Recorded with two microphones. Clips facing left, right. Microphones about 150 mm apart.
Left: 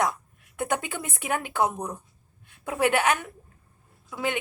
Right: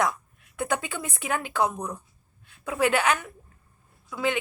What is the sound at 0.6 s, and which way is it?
Speech, 50° left (ahead or behind).